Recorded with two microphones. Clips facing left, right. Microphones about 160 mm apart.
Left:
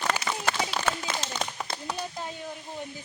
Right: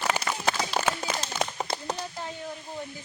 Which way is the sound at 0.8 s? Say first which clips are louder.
Right 1 dB; 10° right (ahead or behind).